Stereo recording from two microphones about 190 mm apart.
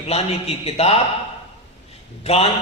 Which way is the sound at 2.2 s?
30° left (ahead or behind).